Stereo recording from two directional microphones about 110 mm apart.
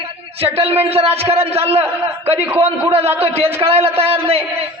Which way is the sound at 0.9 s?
65° right (ahead or behind).